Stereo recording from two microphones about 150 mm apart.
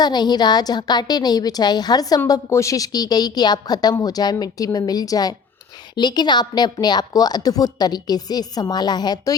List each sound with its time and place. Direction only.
0.0 s a woman's voice: 30° left (ahead or behind)